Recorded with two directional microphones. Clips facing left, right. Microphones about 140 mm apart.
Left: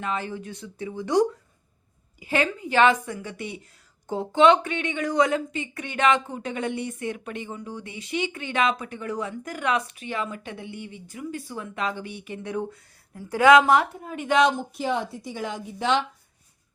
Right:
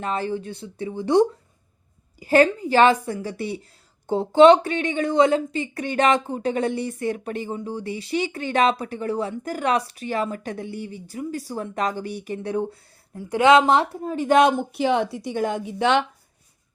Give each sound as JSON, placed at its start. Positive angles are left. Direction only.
{"t": 0.0, "sound": "a woman's voice", "side_deg": -35}
{"t": 2.1, "sound": "a woman's voice", "side_deg": -40}
{"t": 13.1, "sound": "a woman's voice", "side_deg": -20}
{"t": 14.3, "sound": "speech", "side_deg": -55}
{"t": 15.4, "sound": "a woman's voice", "side_deg": -50}
{"t": 15.6, "sound": "speech", "side_deg": -65}